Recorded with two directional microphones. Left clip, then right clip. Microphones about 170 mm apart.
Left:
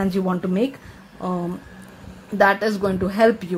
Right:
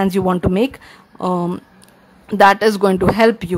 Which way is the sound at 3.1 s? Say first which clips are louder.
Left 2 dB; 30° right (ahead or behind).